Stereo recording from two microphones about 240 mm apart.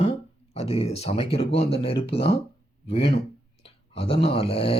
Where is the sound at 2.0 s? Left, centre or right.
Left.